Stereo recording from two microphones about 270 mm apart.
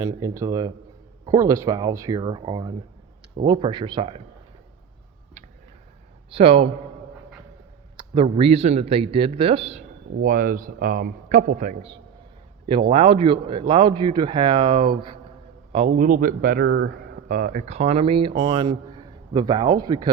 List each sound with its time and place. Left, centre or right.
0.0 s speech: centre
6.3 s speech: right
7.9 s speech: centre